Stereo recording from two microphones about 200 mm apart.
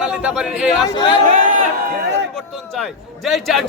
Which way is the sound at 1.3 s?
45° right (ahead or behind).